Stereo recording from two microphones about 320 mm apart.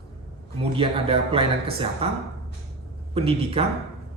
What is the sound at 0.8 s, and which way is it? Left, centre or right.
A man's voice, centre.